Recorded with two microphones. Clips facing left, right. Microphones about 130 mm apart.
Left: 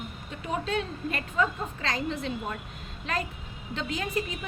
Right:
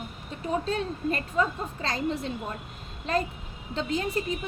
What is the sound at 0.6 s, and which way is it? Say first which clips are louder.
A woman's voice: right 2 dB; 35° right (ahead or behind).